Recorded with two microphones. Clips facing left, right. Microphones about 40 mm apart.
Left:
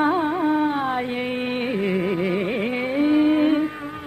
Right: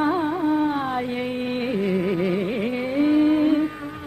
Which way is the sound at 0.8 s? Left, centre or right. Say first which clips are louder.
Left 1 dB; centre.